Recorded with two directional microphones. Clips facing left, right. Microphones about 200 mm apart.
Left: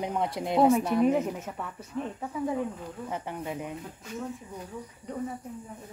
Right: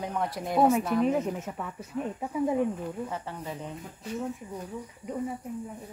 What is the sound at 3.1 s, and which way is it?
Speech, 15° left (ahead or behind).